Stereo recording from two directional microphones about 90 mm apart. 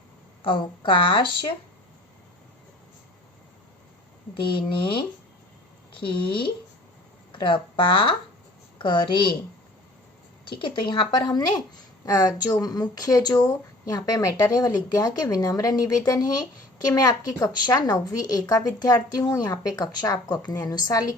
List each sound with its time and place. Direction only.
0.4 s a woman's voice: 70° left (ahead or behind)
4.4 s a woman's voice: 70° left (ahead or behind)
10.4 s speech: 65° left (ahead or behind)
12.0 s speech: 40° left (ahead or behind)